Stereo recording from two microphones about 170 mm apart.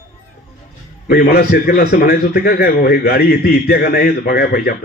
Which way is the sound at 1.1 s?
65° left (ahead or behind).